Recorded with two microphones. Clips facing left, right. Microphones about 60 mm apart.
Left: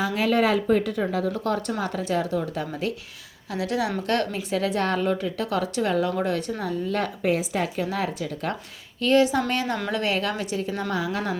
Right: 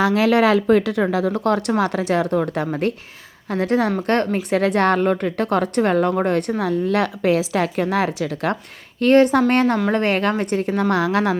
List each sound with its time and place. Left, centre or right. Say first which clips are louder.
0.0 s a woman's voice: right 6 dB; right
3.5 s a woman's voice: right 7 dB; right
4.4 s a woman's voice: right 7 dB; right
9.0 s a woman's voice: right 6 dB; right